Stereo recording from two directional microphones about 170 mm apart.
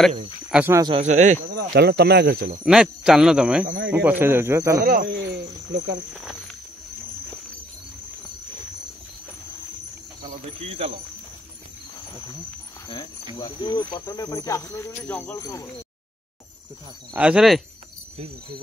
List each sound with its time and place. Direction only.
0.5 s speech: 10° right (ahead or behind)
0.9 s speech: 45° right (ahead or behind)
1.5 s speech: 70° right (ahead or behind)
2.6 s speech: 5° right (ahead or behind)
4.7 s cricket: 60° right (ahead or behind); by 5.9 s 90° right
6.1 s speech: centre (ahead or behind)
10.6 s speech: 35° right (ahead or behind)
13.4 s cricket: 25° left (ahead or behind)
15.0 s speech: 10° left (ahead or behind)
17.1 s speech: 5° right (ahead or behind)